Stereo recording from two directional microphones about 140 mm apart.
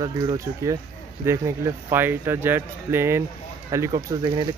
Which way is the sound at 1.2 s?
20° right (ahead or behind).